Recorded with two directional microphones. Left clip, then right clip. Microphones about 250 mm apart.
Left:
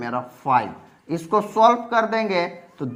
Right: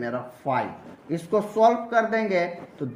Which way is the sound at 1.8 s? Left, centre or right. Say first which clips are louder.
Left 2 dB; left.